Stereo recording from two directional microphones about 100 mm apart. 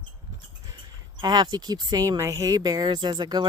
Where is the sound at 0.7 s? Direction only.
45° right (ahead or behind).